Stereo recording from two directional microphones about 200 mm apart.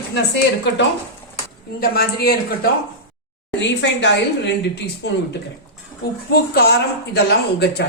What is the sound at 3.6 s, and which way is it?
Speech, 60° left (ahead or behind).